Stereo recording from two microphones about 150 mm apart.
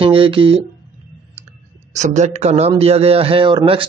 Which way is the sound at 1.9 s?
50° right (ahead or behind).